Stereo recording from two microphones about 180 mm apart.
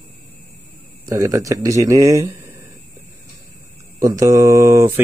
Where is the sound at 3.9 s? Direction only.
20° right (ahead or behind).